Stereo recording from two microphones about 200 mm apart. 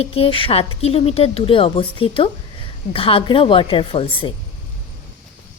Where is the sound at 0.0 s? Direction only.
30° left (ahead or behind).